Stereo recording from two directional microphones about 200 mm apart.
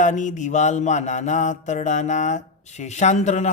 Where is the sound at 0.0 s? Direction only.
40° left (ahead or behind).